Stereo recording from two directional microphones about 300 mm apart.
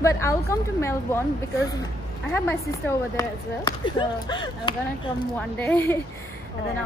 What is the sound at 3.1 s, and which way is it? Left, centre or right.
A woman's voice, centre.